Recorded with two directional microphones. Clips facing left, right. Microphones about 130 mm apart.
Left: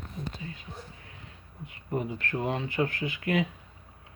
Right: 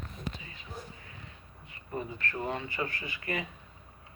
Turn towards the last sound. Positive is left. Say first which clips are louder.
# left 8 dB
turn(degrees=90)